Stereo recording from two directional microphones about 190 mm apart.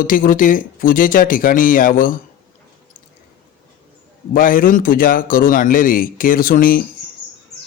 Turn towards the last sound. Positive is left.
turn(degrees=50)  # may be behind; listen again after turning